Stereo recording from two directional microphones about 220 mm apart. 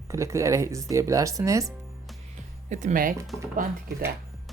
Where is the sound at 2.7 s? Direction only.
35° right (ahead or behind).